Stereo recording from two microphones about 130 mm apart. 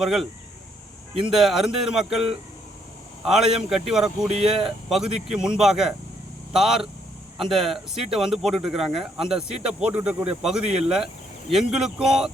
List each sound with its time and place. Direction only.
0.0 s speech: centre (ahead or behind)
1.3 s speech: 5° right (ahead or behind)